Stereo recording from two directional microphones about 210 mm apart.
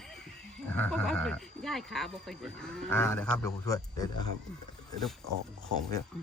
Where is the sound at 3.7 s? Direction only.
15° left (ahead or behind).